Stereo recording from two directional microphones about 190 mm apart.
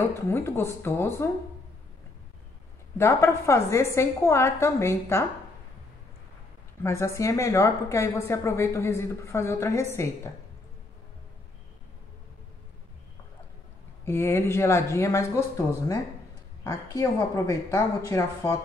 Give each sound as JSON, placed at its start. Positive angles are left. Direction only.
{"t": 0.3, "sound": "a woman's voice", "side_deg": 10}
{"t": 3.0, "sound": "a woman's voice", "side_deg": 15}
{"t": 6.8, "sound": "a woman's voice", "side_deg": 15}
{"t": 14.0, "sound": "a woman's voice", "side_deg": 15}